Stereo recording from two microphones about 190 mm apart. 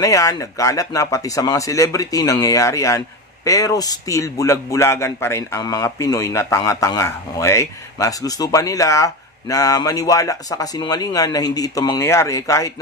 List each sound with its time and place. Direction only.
0.0 s a man's voice: 15° left (ahead or behind)